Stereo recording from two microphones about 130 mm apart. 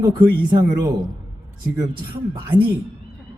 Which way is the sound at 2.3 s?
35° right (ahead or behind).